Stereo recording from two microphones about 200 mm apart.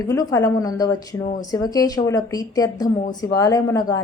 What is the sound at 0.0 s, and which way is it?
A woman's voice, 15° left (ahead or behind).